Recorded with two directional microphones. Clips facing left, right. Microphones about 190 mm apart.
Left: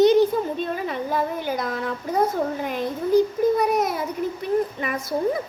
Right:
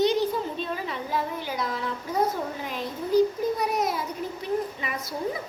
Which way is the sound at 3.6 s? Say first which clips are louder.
Left 5 dB; 50° left (ahead or behind).